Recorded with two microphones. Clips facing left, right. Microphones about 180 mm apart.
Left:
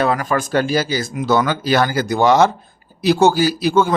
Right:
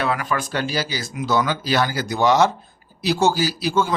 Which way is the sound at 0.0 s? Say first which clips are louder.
Left 5 dB; 45° left (ahead or behind).